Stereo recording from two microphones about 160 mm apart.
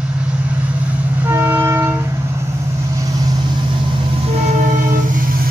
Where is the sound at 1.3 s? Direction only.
15° right (ahead or behind).